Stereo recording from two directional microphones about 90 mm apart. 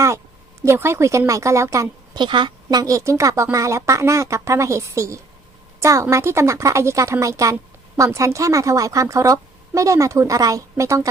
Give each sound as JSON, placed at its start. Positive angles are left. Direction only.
{"t": 0.6, "sound": "speech", "side_deg": -30}
{"t": 2.1, "sound": "a woman's voice", "side_deg": -60}
{"t": 2.6, "sound": "speech", "side_deg": -40}